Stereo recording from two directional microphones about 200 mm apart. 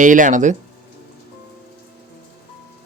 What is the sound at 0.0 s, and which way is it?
Speech, 40° right (ahead or behind).